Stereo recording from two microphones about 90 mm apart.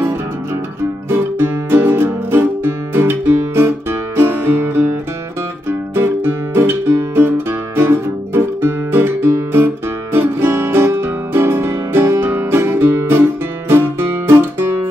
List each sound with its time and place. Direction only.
1.1 s music: 25° right (ahead or behind)
7.7 s guitar: 25° right (ahead or behind)
10.1 s music: 25° right (ahead or behind)